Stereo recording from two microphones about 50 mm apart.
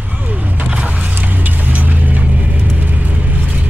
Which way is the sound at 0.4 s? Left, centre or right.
Right.